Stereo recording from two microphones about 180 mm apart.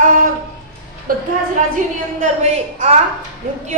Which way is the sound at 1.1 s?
50° right (ahead or behind).